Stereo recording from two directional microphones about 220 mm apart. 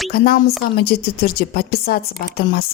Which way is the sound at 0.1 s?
45° left (ahead or behind).